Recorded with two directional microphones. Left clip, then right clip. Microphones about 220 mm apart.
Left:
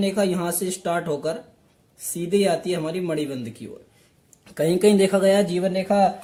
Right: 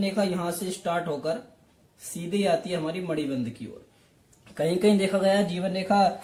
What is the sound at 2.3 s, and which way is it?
Speech, 50° left (ahead or behind).